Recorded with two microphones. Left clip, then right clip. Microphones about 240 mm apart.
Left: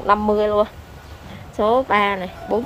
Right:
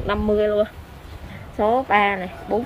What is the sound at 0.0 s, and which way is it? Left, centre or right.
A woman's voice, centre.